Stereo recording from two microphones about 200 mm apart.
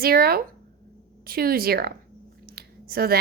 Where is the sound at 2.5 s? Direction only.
50° right (ahead or behind).